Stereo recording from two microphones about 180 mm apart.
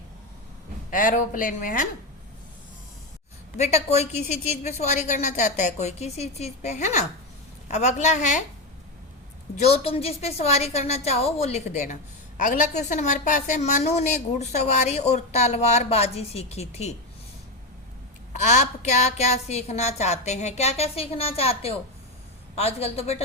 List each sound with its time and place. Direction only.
0.9 s speech: 45° left (ahead or behind)
3.6 s a woman's voice: 35° left (ahead or behind)
9.6 s a woman's voice: 35° left (ahead or behind)
18.3 s a woman's voice: 40° left (ahead or behind)